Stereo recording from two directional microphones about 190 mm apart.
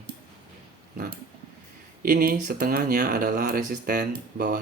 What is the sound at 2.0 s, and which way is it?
Speech, 50° right (ahead or behind).